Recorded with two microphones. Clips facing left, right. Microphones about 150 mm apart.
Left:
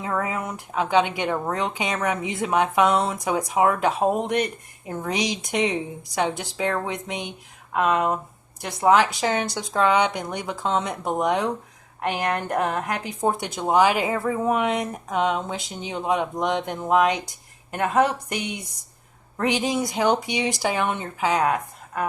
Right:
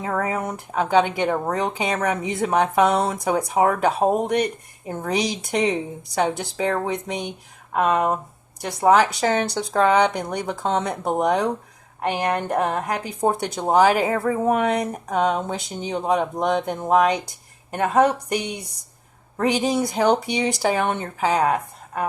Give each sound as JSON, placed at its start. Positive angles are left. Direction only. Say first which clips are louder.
{"t": 0.0, "sound": "a woman's voice", "louder": "right 2 dB", "side_deg": -40}